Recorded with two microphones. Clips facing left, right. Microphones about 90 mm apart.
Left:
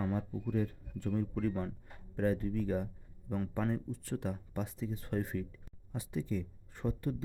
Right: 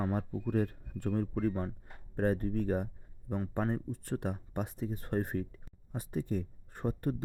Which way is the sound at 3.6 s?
35° right (ahead or behind).